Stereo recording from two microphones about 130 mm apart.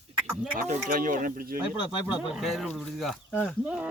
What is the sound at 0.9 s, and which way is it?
Speech, 90° right.